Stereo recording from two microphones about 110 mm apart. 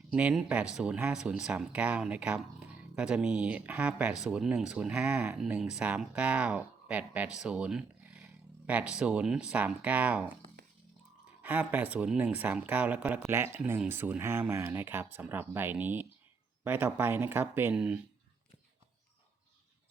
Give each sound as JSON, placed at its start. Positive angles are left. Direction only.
{"t": 0.1, "sound": "speech", "side_deg": -10}
{"t": 11.4, "sound": "speech", "side_deg": -15}